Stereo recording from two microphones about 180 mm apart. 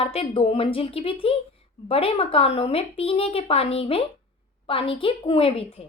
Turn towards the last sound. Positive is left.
turn(degrees=30)  # may be behind; listen again after turning